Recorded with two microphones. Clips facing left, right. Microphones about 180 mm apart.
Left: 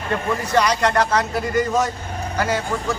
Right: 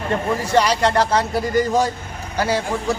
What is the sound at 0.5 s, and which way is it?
A man's voice, 30° right (ahead or behind).